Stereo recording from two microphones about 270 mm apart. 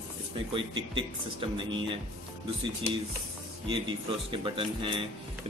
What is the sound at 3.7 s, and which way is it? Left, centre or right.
Speech, centre.